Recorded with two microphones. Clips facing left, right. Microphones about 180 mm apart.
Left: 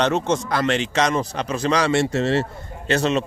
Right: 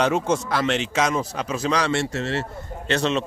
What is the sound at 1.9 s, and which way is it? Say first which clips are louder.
Speech: left 4 dB; 15° left (ahead or behind).